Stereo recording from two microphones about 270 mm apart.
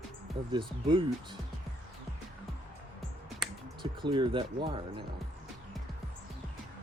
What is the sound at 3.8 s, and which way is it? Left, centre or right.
Speech, centre.